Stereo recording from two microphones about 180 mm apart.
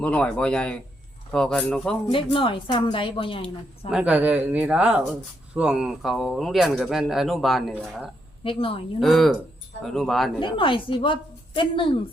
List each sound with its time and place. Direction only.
0.0 s speech: 5° left (ahead or behind)
2.0 s a woman's voice: 30° left (ahead or behind)
3.9 s speech: 10° right (ahead or behind)
8.4 s a woman's voice: 30° left (ahead or behind)
9.0 s speech: centre (ahead or behind)
10.4 s a woman's voice: 30° left (ahead or behind)